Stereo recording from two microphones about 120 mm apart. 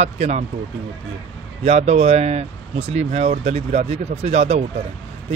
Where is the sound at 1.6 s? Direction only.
65° right (ahead or behind).